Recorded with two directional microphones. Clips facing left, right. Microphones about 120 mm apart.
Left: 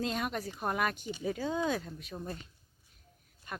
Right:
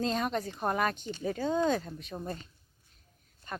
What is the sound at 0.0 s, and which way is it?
Speech, 5° left (ahead or behind).